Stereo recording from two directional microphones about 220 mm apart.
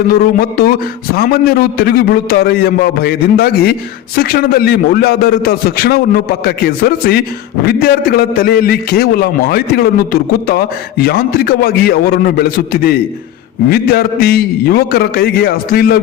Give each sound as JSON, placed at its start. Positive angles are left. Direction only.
{"t": 0.1, "sound": "a man's voice", "side_deg": 40}